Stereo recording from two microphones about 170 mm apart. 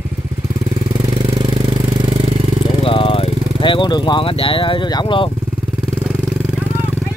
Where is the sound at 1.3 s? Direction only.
30° right (ahead or behind).